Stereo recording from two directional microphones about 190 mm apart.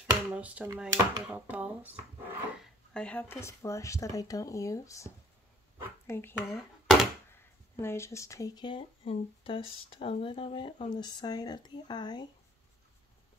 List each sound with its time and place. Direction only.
0.0 s speech: 5° right (ahead or behind)
2.6 s speech: 5° left (ahead or behind)
6.5 s a sound: centre (ahead or behind)
7.3 s speech: 15° left (ahead or behind)